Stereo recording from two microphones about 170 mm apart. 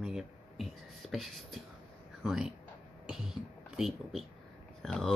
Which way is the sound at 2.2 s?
5° right (ahead or behind).